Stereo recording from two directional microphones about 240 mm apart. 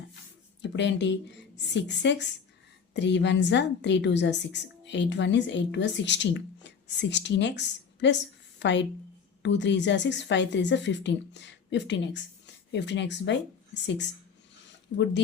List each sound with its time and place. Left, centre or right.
0.6 s a woman's voice: left